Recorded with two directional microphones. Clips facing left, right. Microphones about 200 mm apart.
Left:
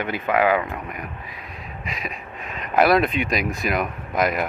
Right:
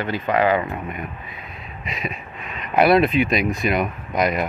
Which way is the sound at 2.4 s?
45° left (ahead or behind).